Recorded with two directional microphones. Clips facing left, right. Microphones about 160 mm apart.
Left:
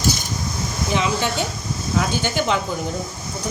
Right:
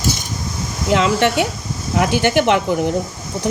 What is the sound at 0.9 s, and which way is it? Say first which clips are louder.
Speech: right 7 dB; 80° right.